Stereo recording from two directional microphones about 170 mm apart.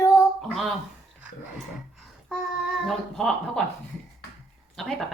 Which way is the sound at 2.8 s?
5° left (ahead or behind).